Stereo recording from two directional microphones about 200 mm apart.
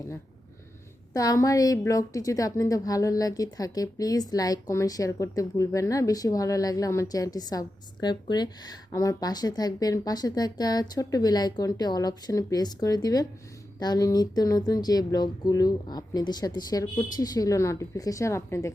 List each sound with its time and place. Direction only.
1.1 s a woman's voice: 15° left (ahead or behind)